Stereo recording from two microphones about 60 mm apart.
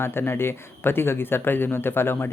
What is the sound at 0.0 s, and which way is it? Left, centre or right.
Speech, left.